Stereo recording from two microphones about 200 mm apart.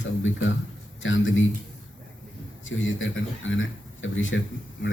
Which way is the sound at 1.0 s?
75° left (ahead or behind).